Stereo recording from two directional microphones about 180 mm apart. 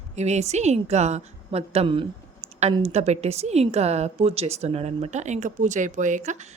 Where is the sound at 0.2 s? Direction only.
40° right (ahead or behind).